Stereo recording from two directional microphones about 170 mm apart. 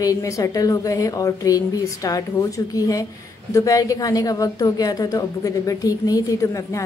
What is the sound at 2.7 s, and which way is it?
A woman's voice, 20° left (ahead or behind).